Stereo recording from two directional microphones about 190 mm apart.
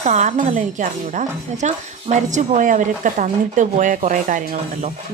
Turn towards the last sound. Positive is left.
turn(degrees=-40)  # may be behind; listen again after turning